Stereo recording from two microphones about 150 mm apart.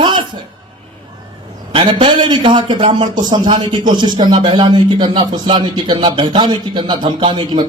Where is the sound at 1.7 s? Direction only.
35° right (ahead or behind).